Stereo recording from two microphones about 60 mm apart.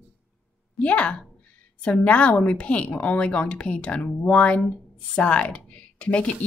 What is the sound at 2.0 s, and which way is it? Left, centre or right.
Speech, left.